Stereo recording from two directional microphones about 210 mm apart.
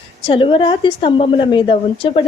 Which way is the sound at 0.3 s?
25° left (ahead or behind).